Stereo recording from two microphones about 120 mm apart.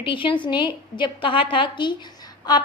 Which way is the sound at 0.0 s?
45° left (ahead or behind).